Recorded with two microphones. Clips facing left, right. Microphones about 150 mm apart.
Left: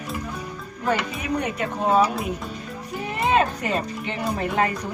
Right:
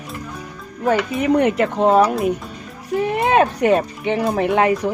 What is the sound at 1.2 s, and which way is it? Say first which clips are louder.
Speech: right 10 dB; 85° right.